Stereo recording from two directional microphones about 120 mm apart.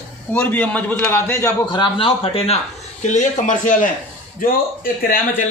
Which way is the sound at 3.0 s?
85° left.